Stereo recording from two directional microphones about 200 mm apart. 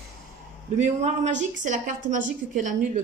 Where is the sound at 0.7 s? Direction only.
35° right (ahead or behind).